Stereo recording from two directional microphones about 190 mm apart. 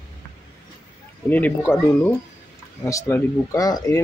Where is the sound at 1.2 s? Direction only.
10° left (ahead or behind).